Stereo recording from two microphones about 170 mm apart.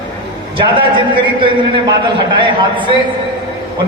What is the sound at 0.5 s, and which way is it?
A man's voice, 30° right (ahead or behind).